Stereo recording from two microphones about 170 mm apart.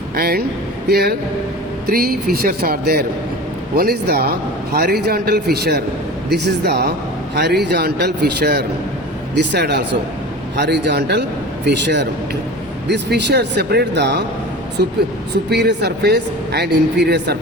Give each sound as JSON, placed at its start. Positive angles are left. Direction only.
{"t": 0.2, "sound": "a man's voice", "side_deg": -65}
{"t": 9.3, "sound": "a man's voice", "side_deg": -85}
{"t": 14.8, "sound": "a man's voice", "side_deg": -75}
{"t": 15.4, "sound": "speech", "side_deg": -85}